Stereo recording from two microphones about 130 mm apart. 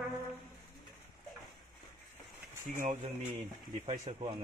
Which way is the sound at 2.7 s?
85° right.